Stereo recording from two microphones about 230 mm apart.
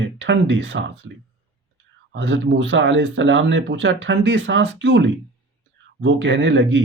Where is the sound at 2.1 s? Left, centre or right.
Right.